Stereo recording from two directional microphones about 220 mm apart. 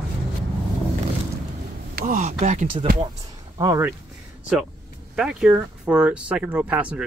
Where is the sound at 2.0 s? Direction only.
35° right (ahead or behind).